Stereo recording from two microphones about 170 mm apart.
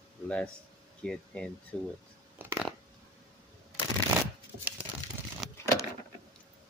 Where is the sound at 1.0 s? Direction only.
5° left (ahead or behind).